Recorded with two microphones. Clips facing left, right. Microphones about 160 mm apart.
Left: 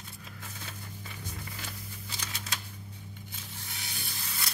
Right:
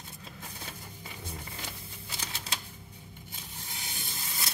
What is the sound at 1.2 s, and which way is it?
Music, 30° right (ahead or behind).